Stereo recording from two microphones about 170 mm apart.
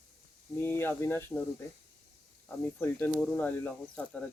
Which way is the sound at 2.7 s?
15° left (ahead or behind).